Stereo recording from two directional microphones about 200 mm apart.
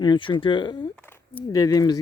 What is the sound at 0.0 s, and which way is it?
Speech, 25° left (ahead or behind).